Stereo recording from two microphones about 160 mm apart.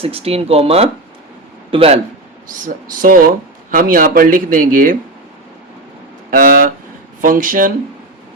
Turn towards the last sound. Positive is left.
turn(degrees=-60)  # may be behind; listen again after turning